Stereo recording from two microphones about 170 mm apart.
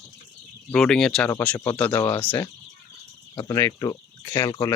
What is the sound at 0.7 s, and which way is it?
Speech, 5° left (ahead or behind).